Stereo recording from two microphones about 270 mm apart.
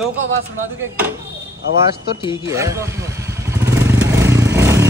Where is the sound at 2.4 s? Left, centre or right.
Centre.